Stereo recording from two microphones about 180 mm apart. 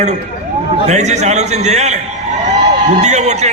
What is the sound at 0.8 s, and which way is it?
A man's voice, 40° right (ahead or behind).